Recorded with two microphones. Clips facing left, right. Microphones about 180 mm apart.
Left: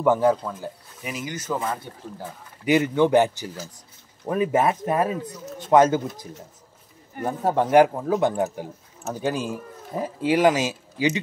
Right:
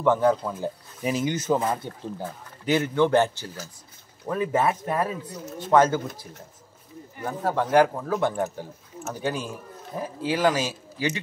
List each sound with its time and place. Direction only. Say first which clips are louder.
0.0 s speech: left 1 dB; 5° left (ahead or behind)
0.6 s speech: right 6 dB; 20° right (ahead or behind)
2.6 s speech: left 3 dB; 15° left (ahead or behind)
7.2 s speech: left 3 dB; 20° left (ahead or behind)